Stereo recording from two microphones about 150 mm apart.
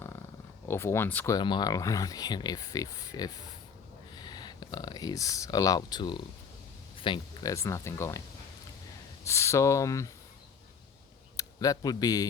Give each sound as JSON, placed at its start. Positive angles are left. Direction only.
{"t": 0.7, "sound": "speech", "side_deg": 15}
{"t": 1.4, "sound": "speech", "side_deg": 30}
{"t": 6.9, "sound": "a sound", "side_deg": 35}
{"t": 7.4, "sound": "speech", "side_deg": 20}
{"t": 9.2, "sound": "speech", "side_deg": 20}
{"t": 11.3, "sound": "speech", "side_deg": 25}